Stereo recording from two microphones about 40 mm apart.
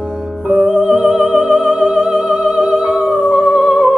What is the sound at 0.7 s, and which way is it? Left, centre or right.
Music, right.